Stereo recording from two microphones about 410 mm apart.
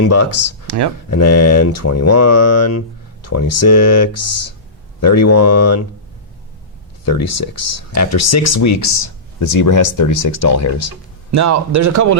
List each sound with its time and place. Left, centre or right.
0.1 s speech: left
7.0 s speech: left
11.3 s a man's voice: right